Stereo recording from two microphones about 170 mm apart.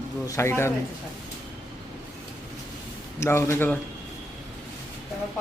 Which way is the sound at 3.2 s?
15° left (ahead or behind).